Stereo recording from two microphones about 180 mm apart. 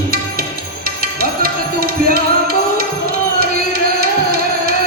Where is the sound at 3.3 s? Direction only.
55° right (ahead or behind).